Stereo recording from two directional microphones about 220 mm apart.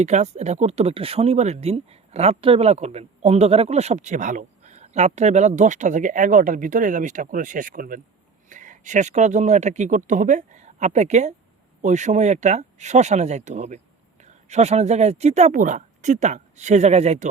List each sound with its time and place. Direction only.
0.0 s speech: 30° right (ahead or behind)